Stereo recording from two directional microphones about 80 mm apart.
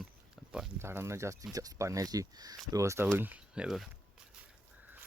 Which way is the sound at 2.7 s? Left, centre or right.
Right.